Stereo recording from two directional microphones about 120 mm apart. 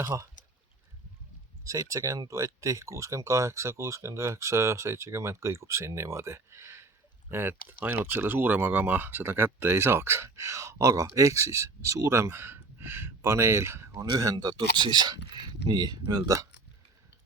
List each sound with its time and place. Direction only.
0.0 s speech: 25° right (ahead or behind)
1.6 s speech: 25° right (ahead or behind)